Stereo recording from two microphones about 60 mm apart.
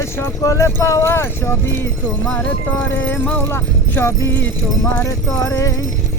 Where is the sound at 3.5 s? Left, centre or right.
Left.